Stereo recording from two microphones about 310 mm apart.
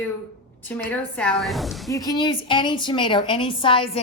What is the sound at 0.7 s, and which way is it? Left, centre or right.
A woman's voice, centre.